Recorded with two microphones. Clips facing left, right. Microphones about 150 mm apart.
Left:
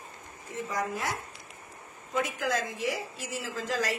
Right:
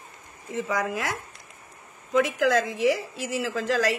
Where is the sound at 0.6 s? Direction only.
90° right.